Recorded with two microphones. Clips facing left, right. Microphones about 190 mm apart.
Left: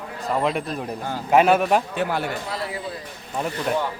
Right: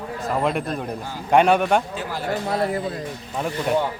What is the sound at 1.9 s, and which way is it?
Speech, 65° left (ahead or behind).